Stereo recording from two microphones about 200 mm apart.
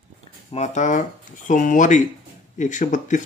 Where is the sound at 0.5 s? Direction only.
35° left (ahead or behind).